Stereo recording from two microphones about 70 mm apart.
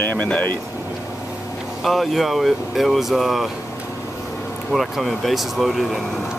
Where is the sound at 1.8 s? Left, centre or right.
Centre.